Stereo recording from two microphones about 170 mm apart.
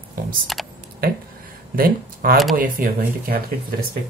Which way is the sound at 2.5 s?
55° right (ahead or behind).